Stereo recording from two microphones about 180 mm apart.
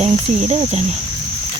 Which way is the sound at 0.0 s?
35° right (ahead or behind).